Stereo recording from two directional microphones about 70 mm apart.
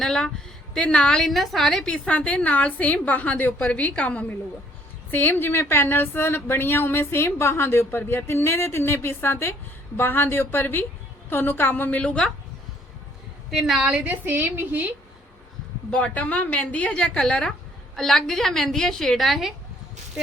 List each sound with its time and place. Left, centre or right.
0.0 s a woman's voice: centre
13.5 s a woman's voice: centre
13.8 s a woman's voice: centre
15.9 s a woman's voice: centre